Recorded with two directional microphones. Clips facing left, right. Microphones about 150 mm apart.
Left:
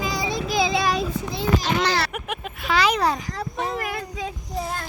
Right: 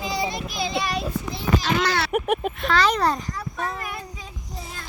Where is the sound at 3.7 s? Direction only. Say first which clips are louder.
Left 5 dB; 70° left (ahead or behind).